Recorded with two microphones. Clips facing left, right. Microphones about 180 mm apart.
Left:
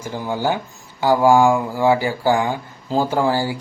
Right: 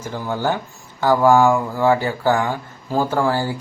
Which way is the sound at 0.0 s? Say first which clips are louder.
Left 1 dB; 10° left (ahead or behind).